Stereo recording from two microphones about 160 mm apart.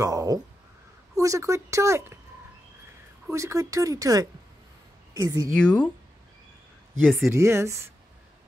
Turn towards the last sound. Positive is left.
turn(degrees=-15)  # may be behind; listen again after turning